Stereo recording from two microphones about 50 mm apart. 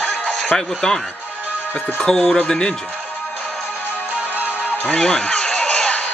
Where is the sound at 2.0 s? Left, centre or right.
Centre.